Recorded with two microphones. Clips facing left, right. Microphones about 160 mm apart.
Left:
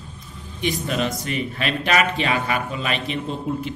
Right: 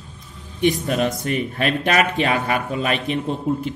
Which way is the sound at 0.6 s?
50° right (ahead or behind).